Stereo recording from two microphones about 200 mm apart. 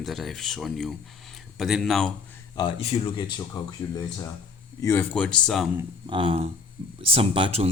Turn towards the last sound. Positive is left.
turn(degrees=-30)  # may be behind; listen again after turning